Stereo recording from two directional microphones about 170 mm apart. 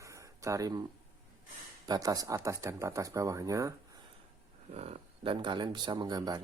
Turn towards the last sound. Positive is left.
turn(degrees=-25)  # may be behind; listen again after turning